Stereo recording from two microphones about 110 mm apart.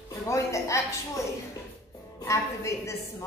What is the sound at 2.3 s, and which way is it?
Speech, 30° left (ahead or behind).